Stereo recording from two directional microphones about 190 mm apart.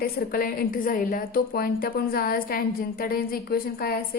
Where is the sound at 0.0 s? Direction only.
50° left (ahead or behind).